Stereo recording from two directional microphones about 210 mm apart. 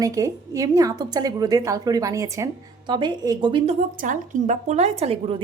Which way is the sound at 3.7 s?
40° right (ahead or behind).